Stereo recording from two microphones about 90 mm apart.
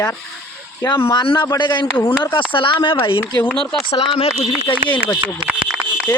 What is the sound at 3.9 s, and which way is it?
Speech, 75° left (ahead or behind).